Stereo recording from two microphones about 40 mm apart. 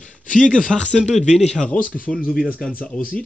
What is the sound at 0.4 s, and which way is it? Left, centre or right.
Speech, left.